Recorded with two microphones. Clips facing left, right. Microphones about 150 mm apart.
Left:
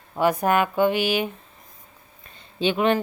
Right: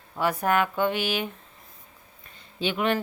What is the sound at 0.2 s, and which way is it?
Speech, 15° left (ahead or behind).